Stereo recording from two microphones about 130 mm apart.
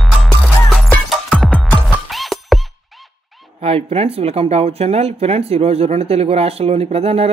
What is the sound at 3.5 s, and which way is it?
Speech, 45° right (ahead or behind).